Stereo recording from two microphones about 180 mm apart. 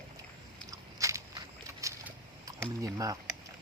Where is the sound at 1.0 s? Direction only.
15° right (ahead or behind).